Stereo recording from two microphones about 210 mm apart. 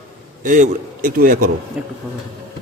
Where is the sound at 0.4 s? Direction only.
40° right (ahead or behind).